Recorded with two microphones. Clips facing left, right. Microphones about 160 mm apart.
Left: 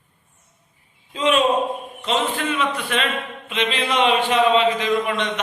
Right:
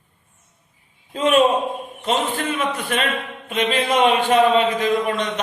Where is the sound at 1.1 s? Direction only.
50° right (ahead or behind).